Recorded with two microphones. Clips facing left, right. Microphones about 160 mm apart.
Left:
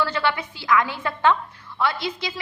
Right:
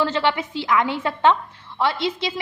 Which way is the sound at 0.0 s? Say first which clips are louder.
Right 3 dB; 25° right (ahead or behind).